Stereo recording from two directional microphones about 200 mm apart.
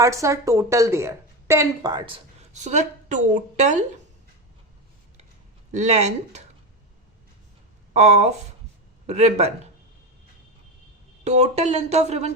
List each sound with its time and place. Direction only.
0.0 s speech: 15° right (ahead or behind); by 3.8 s 35° right (ahead or behind)
5.7 s speech: 35° right (ahead or behind)
7.9 s speech: 35° right (ahead or behind)
11.2 s speech: 35° right (ahead or behind)